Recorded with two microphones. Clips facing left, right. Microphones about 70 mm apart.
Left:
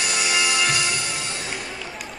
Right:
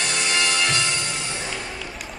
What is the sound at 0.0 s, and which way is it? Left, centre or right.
Music, centre.